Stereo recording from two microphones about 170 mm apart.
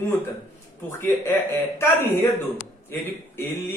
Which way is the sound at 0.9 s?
15° left (ahead or behind).